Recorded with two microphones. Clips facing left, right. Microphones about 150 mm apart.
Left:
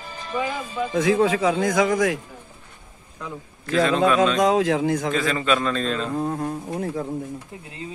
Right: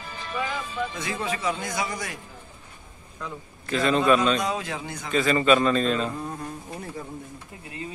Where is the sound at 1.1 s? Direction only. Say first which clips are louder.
Left 9 dB; 90° left.